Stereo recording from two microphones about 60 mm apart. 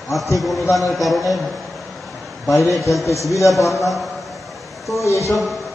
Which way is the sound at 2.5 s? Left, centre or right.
Left.